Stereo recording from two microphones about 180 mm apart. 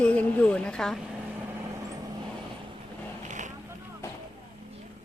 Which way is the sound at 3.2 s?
45° right (ahead or behind).